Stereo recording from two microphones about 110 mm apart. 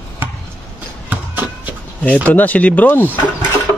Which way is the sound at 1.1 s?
15° right (ahead or behind).